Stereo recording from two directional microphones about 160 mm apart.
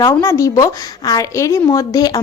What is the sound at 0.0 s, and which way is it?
A woman's voice, 20° left (ahead or behind).